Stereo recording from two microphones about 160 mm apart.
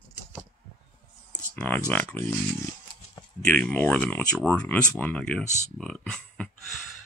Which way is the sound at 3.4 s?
10° left (ahead or behind).